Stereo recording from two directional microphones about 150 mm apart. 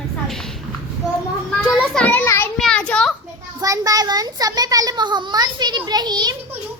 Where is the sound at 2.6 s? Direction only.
5° left (ahead or behind).